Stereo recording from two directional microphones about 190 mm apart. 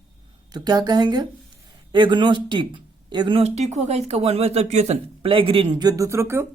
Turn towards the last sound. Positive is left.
turn(degrees=-15)  # may be behind; listen again after turning